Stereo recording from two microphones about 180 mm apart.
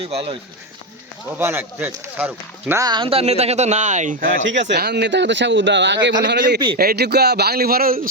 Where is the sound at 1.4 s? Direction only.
15° right (ahead or behind); by 4.4 s 45° right (ahead or behind).